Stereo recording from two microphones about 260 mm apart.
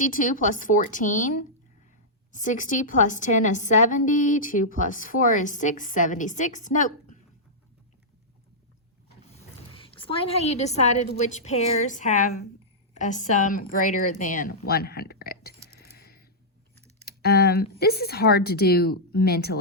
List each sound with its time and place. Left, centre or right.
0.0 s a woman's voice: left
2.3 s a woman's voice: left
9.6 s a woman's voice: left
16.0 s a sound: left
16.7 s a sound: right
17.1 s speech: left